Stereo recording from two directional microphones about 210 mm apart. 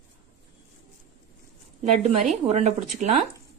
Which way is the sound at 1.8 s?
30° right (ahead or behind).